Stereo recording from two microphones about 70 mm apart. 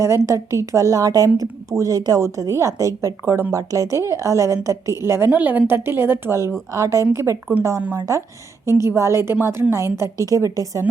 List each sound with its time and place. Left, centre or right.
0.0 s a woman's voice: right
5.3 s a woman's voice: right
6.7 s a woman's voice: right
7.5 s speech: centre
7.9 s speech: right
9.0 s a woman's voice: right
10.2 s a woman's voice: right